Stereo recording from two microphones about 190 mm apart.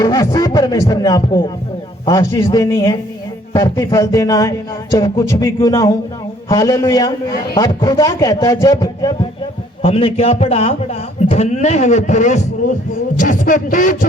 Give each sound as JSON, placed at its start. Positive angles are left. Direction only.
{"t": 0.0, "sound": "a man's voice", "side_deg": 20}